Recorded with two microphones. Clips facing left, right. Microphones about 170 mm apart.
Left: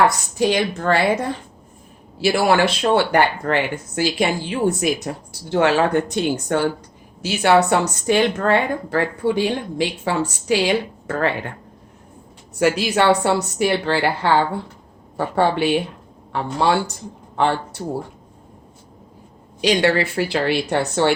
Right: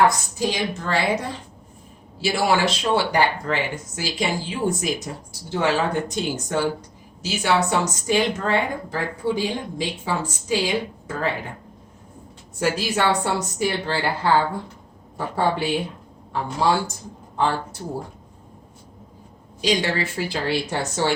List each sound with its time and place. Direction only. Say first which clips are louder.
0.3 s speech: left 6 dB; 60° left (ahead or behind)
2.2 s speech: left 4 dB; 60° left (ahead or behind)
12.5 s a woman's voice: left 5 dB; 70° left (ahead or behind)
15.4 s a woman's voice: left 4 dB; 70° left (ahead or behind)
19.6 s a woman's voice: left 5 dB; 65° left (ahead or behind)